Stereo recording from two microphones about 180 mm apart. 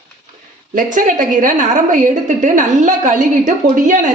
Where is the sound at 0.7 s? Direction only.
45° right (ahead or behind).